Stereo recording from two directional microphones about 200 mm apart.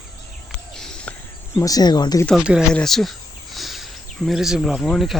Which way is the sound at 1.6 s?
20° left (ahead or behind).